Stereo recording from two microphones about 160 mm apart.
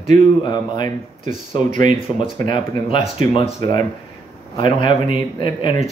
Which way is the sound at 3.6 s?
25° left (ahead or behind).